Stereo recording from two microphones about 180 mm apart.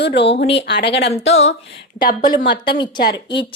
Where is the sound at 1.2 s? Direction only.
90° left.